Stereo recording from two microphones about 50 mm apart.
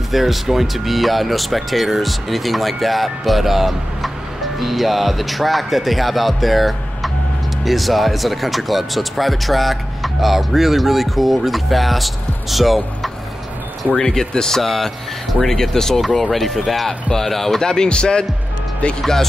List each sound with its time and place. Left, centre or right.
0.1 s speech: centre
13.8 s speech: centre